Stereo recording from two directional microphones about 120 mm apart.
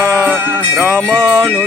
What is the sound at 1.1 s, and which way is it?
Music, 25° right (ahead or behind).